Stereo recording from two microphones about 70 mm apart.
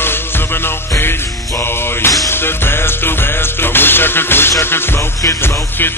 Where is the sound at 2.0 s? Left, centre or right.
Left.